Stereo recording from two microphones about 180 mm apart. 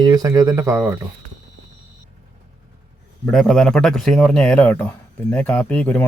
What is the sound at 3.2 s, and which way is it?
Speech, centre (ahead or behind).